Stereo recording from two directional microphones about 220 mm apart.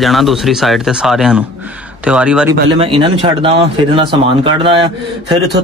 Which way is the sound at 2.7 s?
25° right (ahead or behind).